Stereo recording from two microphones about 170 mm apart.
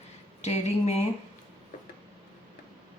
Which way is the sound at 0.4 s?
40° left (ahead or behind).